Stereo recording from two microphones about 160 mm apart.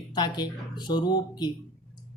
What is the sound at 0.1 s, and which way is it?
A man's voice, 25° left (ahead or behind).